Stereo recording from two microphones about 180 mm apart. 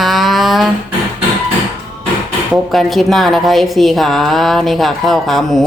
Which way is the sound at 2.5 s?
Centre (ahead or behind).